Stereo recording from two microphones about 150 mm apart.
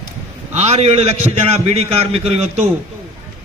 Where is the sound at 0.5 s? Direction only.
45° right (ahead or behind).